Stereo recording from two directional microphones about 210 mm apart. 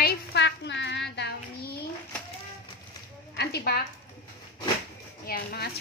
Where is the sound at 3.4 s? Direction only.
50° left (ahead or behind).